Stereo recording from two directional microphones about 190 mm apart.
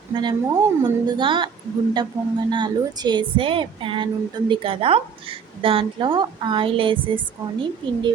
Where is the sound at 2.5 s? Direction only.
20° right (ahead or behind).